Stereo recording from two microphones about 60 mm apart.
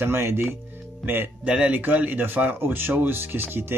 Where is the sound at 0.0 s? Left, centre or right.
Right.